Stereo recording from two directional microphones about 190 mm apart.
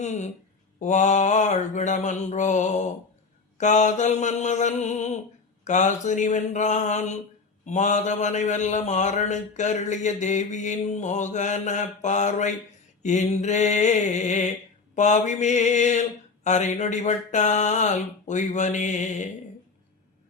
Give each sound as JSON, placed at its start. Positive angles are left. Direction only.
{"t": 0.0, "sound": "mantra", "side_deg": 40}